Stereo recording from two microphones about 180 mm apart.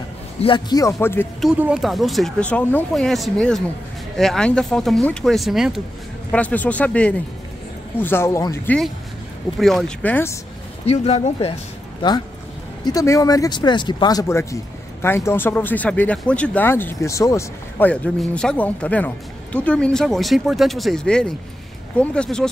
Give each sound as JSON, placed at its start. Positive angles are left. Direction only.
{"t": 0.4, "sound": "a man's voice", "side_deg": 25}
{"t": 1.6, "sound": "speech", "side_deg": -5}
{"t": 9.6, "sound": "speech", "side_deg": 0}
{"t": 10.9, "sound": "a man's voice", "side_deg": 35}